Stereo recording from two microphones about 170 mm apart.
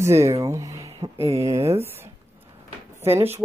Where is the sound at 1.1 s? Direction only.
35° right (ahead or behind).